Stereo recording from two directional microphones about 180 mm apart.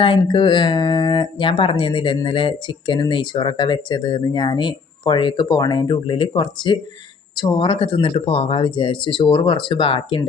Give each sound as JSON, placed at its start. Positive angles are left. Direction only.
{"t": 0.0, "sound": "speech", "side_deg": 25}